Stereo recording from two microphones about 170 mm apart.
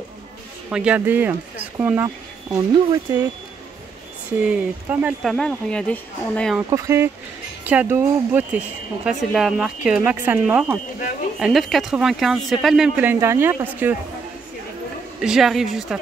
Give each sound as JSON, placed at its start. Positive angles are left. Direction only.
{"t": 0.7, "sound": "speech", "side_deg": -5}
{"t": 4.4, "sound": "speech", "side_deg": -5}
{"t": 6.7, "sound": "speech", "side_deg": -15}
{"t": 15.1, "sound": "speech", "side_deg": -5}